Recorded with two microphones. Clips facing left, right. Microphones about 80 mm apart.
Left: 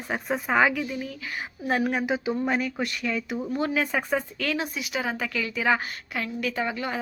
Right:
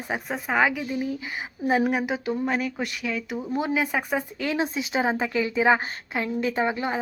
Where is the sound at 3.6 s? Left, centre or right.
Centre.